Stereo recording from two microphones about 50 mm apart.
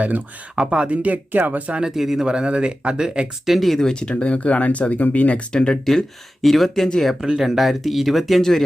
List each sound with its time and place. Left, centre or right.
0.5 s speech: centre
1.0 s speech: right
2.0 s speech: centre
3.4 s speech: centre
4.1 s speech: left
5.5 s speech: centre
7.2 s speech: centre
8.4 s speech: centre